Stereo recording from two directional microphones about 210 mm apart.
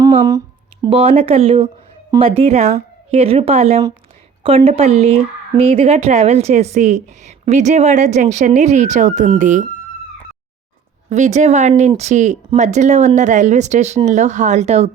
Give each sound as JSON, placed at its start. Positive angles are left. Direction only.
{"t": 0.0, "sound": "speech", "side_deg": -15}
{"t": 11.1, "sound": "speech", "side_deg": -35}